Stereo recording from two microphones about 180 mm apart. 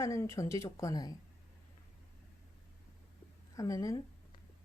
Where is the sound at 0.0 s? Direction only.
15° left (ahead or behind).